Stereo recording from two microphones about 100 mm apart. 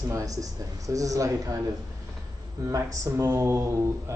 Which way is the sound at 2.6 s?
35° right (ahead or behind).